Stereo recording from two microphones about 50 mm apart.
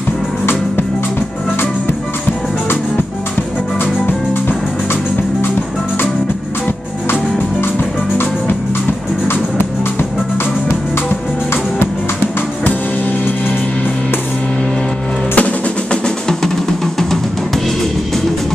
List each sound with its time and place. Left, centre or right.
3.8 s music: left
9.3 s music: left
15.3 s percussion: left